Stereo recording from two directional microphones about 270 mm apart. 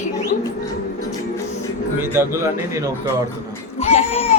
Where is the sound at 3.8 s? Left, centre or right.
Left.